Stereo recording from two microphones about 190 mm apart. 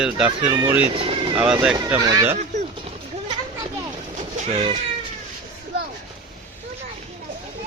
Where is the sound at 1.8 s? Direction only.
20° right (ahead or behind).